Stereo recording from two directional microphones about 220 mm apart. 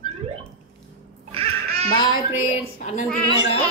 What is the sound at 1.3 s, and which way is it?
Music, 25° right (ahead or behind).